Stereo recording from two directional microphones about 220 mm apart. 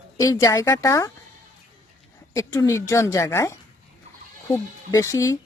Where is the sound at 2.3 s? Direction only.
15° left (ahead or behind).